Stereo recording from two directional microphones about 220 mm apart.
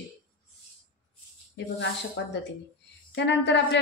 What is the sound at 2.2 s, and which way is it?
A woman's voice, 55° left (ahead or behind).